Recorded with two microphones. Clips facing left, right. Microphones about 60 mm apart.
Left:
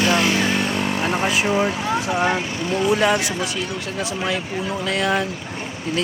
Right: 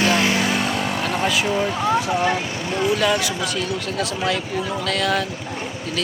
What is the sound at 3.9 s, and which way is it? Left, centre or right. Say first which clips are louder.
Speech: even; centre.